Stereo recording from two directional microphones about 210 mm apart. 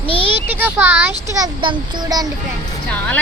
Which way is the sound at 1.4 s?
20° right (ahead or behind).